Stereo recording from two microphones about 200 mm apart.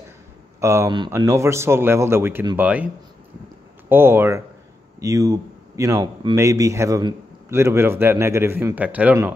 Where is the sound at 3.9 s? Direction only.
10° right (ahead or behind).